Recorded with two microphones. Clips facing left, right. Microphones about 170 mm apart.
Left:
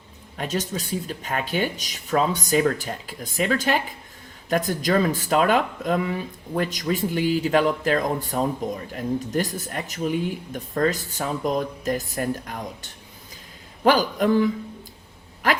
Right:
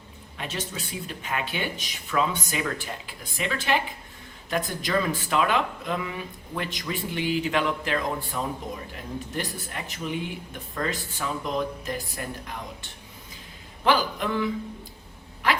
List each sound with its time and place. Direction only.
0.3 s speech: 40° left (ahead or behind)
13.8 s speech: 40° left (ahead or behind)